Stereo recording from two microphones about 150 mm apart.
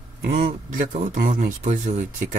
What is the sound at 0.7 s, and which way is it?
Speech, 65° right (ahead or behind).